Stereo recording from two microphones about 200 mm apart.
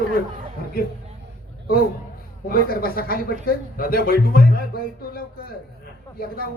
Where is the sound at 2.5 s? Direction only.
45° left (ahead or behind).